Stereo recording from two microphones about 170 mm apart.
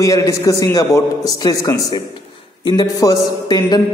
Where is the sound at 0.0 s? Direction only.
20° left (ahead or behind).